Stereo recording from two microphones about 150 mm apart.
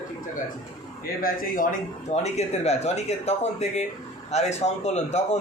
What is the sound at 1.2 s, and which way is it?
Speech, 70° left (ahead or behind).